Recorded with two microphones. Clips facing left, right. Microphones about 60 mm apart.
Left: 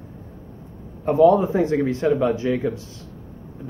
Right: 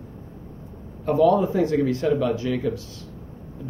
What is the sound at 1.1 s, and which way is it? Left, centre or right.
Speech, left.